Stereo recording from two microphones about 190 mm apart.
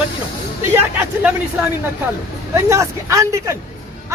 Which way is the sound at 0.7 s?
10° right (ahead or behind).